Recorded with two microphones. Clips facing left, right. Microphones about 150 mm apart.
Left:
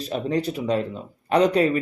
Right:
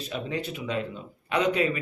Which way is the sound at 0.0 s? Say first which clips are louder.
Left 7 dB; 40° left (ahead or behind).